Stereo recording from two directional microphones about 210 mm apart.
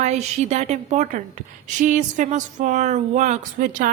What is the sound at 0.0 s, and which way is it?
A woman's voice, 35° right (ahead or behind).